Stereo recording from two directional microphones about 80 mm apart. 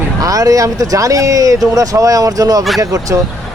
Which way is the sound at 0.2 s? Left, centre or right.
Right.